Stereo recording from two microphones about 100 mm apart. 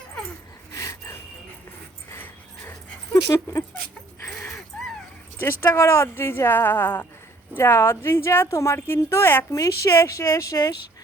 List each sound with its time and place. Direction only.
0.7 s a sound: 30° left (ahead or behind)
2.0 s dog: 20° left (ahead or behind)
3.2 s speech: 30° left (ahead or behind)
4.3 s dog: 5° left (ahead or behind)
5.4 s a woman's voice: 25° left (ahead or behind)
9.5 s speech: 35° left (ahead or behind)